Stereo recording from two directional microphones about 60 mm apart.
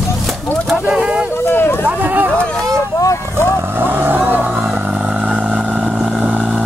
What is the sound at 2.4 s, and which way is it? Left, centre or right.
Vehicle, centre.